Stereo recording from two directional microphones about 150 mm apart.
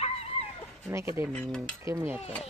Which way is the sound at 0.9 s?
15° right (ahead or behind).